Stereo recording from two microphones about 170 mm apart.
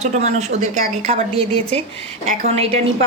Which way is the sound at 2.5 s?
40° right (ahead or behind).